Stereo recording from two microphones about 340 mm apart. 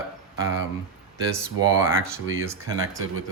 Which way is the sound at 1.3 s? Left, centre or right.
Centre.